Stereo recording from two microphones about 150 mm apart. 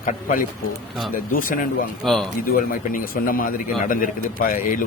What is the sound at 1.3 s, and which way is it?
Speech, 70° left (ahead or behind).